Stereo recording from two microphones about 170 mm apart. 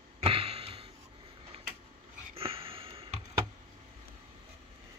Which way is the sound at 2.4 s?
35° right (ahead or behind).